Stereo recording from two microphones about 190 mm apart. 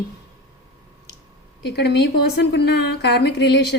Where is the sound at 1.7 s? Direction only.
60° left (ahead or behind).